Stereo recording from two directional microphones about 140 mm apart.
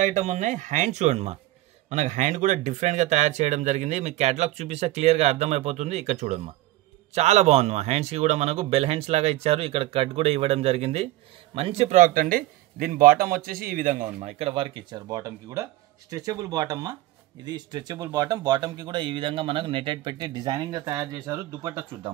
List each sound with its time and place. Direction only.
0.0 s speech: 60° right (ahead or behind)
12.0 s a man's voice: 75° right (ahead or behind)
14.4 s speech: 40° right (ahead or behind); by 21.8 s 25° right (ahead or behind)